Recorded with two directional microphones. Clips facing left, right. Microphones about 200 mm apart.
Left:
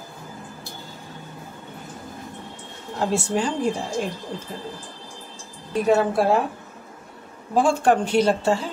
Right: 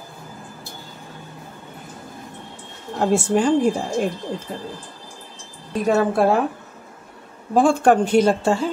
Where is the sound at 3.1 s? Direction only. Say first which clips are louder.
Right 6 dB; 50° right (ahead or behind).